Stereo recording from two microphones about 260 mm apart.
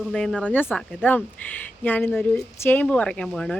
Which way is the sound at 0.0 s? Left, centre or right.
Centre.